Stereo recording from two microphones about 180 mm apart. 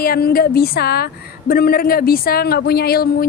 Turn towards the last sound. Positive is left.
turn(degrees=60)  # may be behind; listen again after turning